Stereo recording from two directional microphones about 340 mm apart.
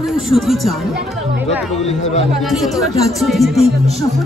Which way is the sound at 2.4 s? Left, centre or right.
Centre.